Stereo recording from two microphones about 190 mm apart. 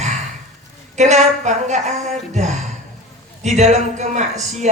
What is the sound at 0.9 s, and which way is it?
A woman's voice, 40° right (ahead or behind).